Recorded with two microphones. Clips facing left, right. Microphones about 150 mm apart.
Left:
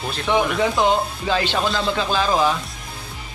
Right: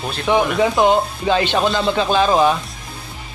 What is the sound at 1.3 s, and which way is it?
Speech, 20° right (ahead or behind).